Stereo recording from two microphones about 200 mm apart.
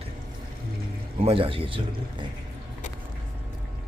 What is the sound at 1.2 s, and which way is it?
Speech, 30° right (ahead or behind).